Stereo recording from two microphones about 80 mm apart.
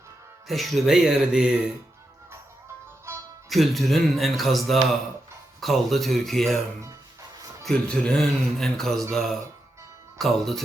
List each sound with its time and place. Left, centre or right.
0.4 s speech: centre
3.5 s speech: centre
7.6 s speech: centre